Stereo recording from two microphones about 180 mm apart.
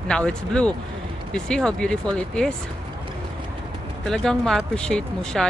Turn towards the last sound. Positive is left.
turn(degrees=5)  # may be behind; listen again after turning